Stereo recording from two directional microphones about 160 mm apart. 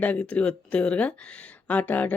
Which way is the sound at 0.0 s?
10° left (ahead or behind).